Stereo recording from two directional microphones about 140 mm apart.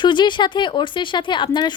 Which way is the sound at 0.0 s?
35° left (ahead or behind).